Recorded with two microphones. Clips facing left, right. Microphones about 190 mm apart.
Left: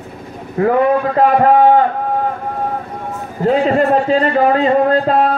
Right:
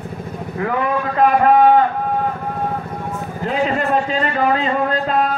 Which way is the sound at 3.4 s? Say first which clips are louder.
Left 7 dB; 30° left (ahead or behind).